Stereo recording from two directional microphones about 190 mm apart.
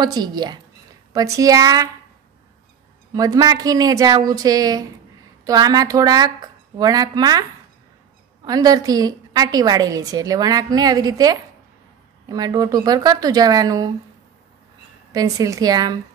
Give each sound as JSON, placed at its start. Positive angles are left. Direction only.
{"t": 0.0, "sound": "a woman's voice", "side_deg": -20}
{"t": 3.2, "sound": "a woman's voice", "side_deg": -20}
{"t": 8.5, "sound": "a woman's voice", "side_deg": -20}
{"t": 15.1, "sound": "a woman's voice", "side_deg": -20}